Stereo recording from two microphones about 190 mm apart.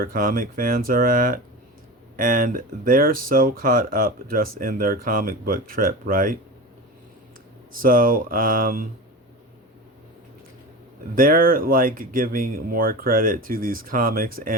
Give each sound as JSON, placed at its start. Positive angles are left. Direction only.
{"t": 0.0, "sound": "speech", "side_deg": -45}
{"t": 7.7, "sound": "speech", "side_deg": -50}
{"t": 11.1, "sound": "speech", "side_deg": -50}